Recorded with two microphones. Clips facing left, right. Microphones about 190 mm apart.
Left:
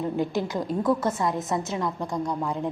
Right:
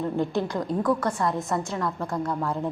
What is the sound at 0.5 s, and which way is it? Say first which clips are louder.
A woman's voice: even; 20° left (ahead or behind).